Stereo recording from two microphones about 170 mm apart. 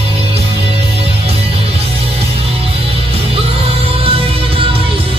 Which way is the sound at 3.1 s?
35° right (ahead or behind).